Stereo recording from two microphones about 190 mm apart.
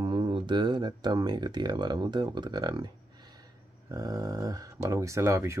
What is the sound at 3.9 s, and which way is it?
Speech, 20° right (ahead or behind).